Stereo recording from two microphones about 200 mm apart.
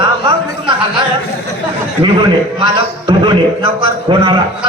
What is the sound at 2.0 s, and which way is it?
A man's voice, 25° right (ahead or behind).